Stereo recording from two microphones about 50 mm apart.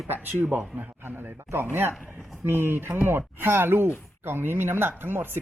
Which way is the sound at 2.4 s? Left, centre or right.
Right.